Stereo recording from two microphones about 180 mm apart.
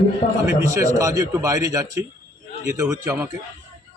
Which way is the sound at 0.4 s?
15° right (ahead or behind).